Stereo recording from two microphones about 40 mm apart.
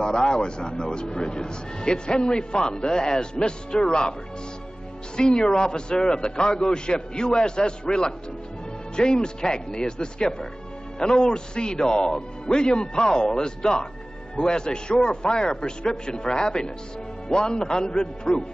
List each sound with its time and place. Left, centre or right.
0.0 s a man's voice: left
5.1 s a man's voice: left